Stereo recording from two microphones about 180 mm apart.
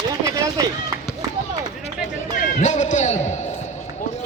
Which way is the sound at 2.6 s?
40° left (ahead or behind).